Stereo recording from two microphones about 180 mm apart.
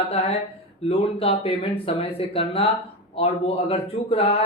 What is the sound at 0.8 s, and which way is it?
Speech, 30° left (ahead or behind).